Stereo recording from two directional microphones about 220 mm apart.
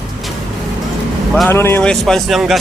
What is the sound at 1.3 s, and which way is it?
Speech, centre (ahead or behind).